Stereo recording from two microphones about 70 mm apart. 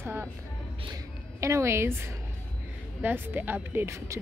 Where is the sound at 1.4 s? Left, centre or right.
Right.